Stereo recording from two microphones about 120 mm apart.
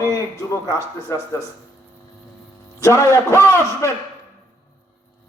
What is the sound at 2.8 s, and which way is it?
A man's voice, 25° left (ahead or behind).